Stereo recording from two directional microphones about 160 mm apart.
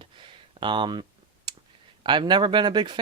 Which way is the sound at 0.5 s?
30° right (ahead or behind).